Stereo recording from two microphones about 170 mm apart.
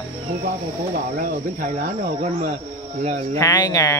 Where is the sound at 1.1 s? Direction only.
55° right (ahead or behind).